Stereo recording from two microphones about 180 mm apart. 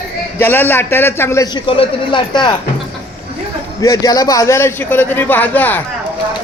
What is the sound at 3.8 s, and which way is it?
A man's voice, 20° left (ahead or behind).